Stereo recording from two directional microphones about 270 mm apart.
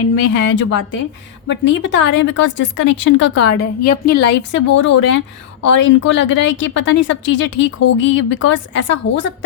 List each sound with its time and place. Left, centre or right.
0.3 s a woman's voice: left